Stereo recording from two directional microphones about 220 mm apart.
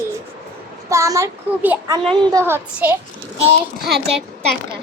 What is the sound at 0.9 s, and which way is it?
A child's voice, 15° right (ahead or behind).